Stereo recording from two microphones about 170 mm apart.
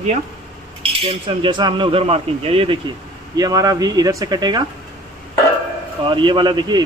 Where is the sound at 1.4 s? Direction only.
25° right (ahead or behind).